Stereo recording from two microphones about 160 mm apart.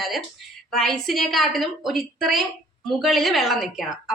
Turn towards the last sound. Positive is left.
turn(degrees=0)  # may be behind; listen again after turning